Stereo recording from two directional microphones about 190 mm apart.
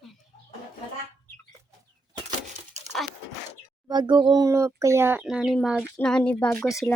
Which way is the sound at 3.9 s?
25° right (ahead or behind).